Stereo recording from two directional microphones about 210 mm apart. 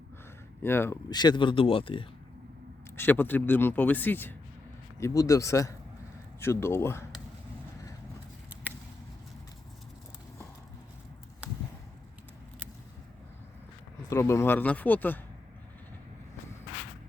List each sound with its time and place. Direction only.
0.6 s speech: 10° left (ahead or behind)
2.9 s speech: 10° left (ahead or behind)
14.1 s speech: 15° left (ahead or behind)